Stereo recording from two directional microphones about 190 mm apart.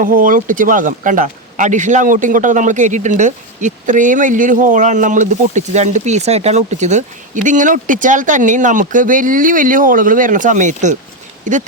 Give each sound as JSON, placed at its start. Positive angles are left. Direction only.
{"t": 0.0, "sound": "speech", "side_deg": -45}